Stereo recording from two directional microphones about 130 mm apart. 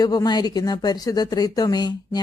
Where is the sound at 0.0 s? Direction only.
30° left (ahead or behind).